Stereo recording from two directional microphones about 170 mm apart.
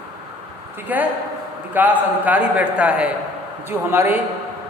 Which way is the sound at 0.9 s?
10° right (ahead or behind).